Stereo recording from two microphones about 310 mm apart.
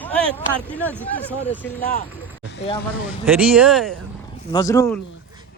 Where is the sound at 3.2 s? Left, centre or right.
Centre.